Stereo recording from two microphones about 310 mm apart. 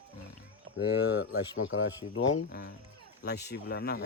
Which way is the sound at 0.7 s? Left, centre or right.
Right.